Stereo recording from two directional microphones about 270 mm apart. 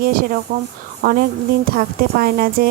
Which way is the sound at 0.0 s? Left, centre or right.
Right.